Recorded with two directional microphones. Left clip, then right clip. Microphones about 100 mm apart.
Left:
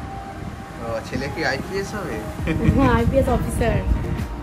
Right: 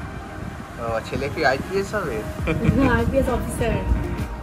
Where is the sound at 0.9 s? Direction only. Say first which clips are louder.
Right 1 dB; 25° left (ahead or behind).